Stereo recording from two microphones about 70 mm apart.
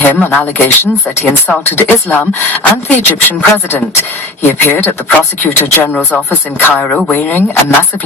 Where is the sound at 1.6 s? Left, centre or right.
Left.